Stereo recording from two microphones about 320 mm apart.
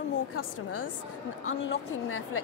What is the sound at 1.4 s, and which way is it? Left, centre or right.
A woman's voice, left.